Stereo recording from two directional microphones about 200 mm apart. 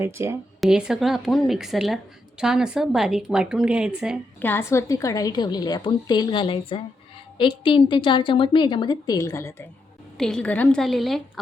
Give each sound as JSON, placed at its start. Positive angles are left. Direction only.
{"t": 0.0, "sound": "a woman's voice", "side_deg": -15}
{"t": 4.4, "sound": "a woman's voice", "side_deg": 10}
{"t": 10.2, "sound": "a woman's voice", "side_deg": 0}